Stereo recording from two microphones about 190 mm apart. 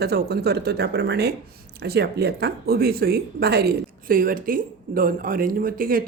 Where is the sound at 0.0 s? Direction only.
60° right (ahead or behind).